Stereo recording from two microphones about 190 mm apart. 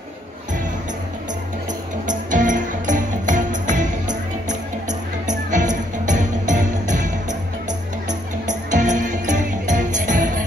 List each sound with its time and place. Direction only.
2.0 s music: 40° right (ahead or behind)
8.1 s music: 40° right (ahead or behind)